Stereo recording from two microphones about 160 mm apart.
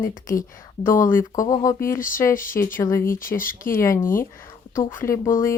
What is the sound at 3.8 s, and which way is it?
Speech, 15° left (ahead or behind).